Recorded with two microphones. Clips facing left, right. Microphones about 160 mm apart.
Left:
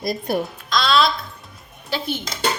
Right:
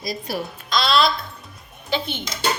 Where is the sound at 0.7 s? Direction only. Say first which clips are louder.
Even; centre (ahead or behind).